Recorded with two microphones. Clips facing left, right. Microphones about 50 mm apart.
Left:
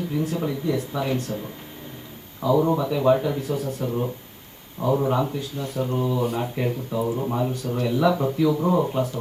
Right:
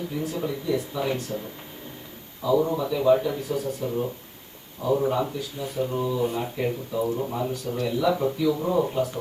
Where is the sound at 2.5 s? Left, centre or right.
Left.